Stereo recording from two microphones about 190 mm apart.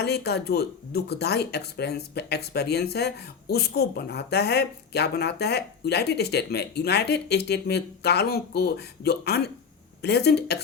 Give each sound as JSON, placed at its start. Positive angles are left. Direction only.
{"t": 0.0, "sound": "a woman's voice", "side_deg": 60}